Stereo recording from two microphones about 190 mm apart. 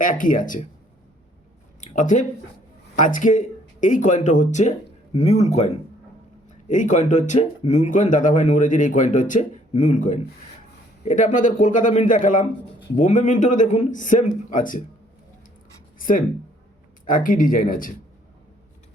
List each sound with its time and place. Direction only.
0.0 s speech: 45° left (ahead or behind)
1.8 s speech: 40° left (ahead or behind)
16.0 s writing: 45° left (ahead or behind)
17.1 s speech: 45° left (ahead or behind)